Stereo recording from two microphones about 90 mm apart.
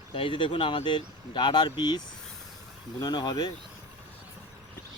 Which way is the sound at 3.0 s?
55° left (ahead or behind).